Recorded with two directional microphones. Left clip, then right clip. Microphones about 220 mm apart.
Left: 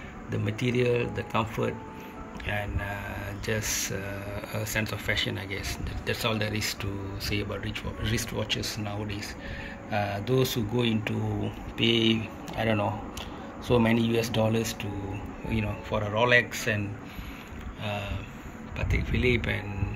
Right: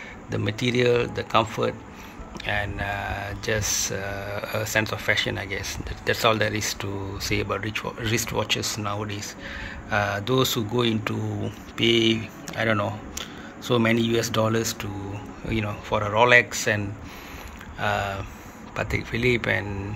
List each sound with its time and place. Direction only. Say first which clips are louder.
0.3 s speech: right 4 dB; 10° right (ahead or behind)
13.7 s speech: right 3 dB; 10° right (ahead or behind)
15.4 s speech: right 4 dB; 15° right (ahead or behind)